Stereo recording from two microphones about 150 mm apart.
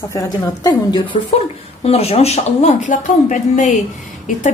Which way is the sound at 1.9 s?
45° left (ahead or behind).